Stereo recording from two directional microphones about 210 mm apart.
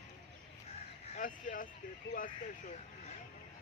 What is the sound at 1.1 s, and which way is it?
Speech, 40° left (ahead or behind).